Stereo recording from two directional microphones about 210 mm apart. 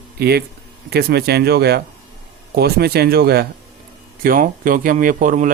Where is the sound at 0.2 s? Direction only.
50° right (ahead or behind).